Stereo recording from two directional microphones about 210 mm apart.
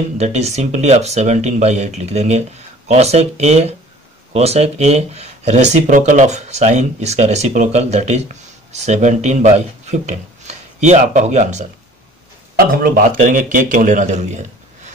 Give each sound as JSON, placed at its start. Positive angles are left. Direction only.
{"t": 0.2, "sound": "speech", "side_deg": -30}
{"t": 12.5, "sound": "speech", "side_deg": -45}